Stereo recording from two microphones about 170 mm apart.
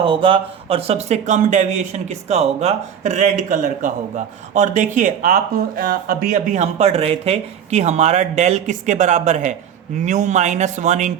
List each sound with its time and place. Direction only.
0.0 s speech: 30° right (ahead or behind)